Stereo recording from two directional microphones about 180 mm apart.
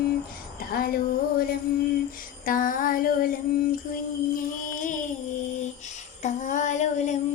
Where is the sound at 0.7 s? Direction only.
55° left (ahead or behind).